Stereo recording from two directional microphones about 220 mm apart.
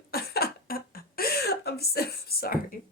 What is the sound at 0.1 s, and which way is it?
A woman's voice, 45° left (ahead or behind).